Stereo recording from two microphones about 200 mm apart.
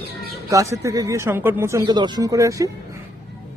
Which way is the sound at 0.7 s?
15° right (ahead or behind).